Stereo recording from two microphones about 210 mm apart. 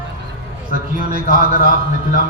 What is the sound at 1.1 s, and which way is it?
Speech, 40° right (ahead or behind).